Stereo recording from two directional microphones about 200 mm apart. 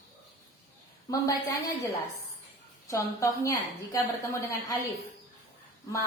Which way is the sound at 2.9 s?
15° left (ahead or behind).